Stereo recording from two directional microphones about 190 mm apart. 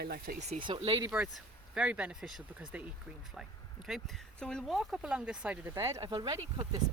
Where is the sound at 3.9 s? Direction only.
Centre (ahead or behind).